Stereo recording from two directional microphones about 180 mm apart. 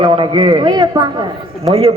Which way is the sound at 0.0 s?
25° right (ahead or behind).